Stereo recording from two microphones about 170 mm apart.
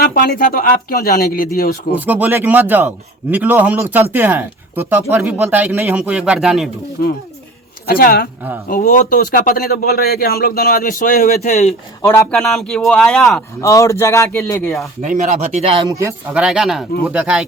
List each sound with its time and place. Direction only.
0.0 s a man's voice: 65° left (ahead or behind)
2.0 s a man's voice: 10° right (ahead or behind)
7.0 s speech: 70° left (ahead or behind)
7.9 s a man's voice: 60° left (ahead or behind)
12.3 s speech: centre (ahead or behind)
13.6 s a man's voice: 20° left (ahead or behind)
15.0 s speech: 45° right (ahead or behind)
15.9 s a man's voice: 15° right (ahead or behind)
16.4 s a man's voice: 5° right (ahead or behind)